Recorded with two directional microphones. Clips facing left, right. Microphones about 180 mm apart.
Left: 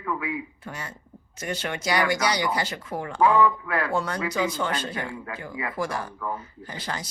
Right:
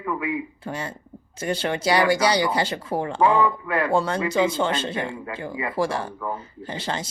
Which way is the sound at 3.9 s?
30° right (ahead or behind).